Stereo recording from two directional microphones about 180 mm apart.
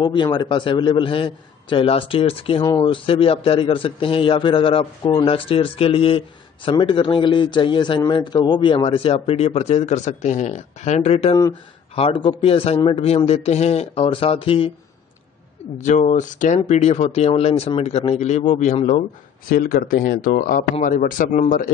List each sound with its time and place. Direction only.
0.0 s a man's voice: 25° left (ahead or behind)
15.8 s a man's voice: 45° left (ahead or behind)
19.5 s speech: 50° left (ahead or behind)